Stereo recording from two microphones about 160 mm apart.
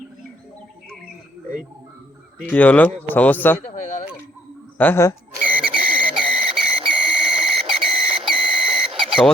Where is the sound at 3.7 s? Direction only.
55° left (ahead or behind).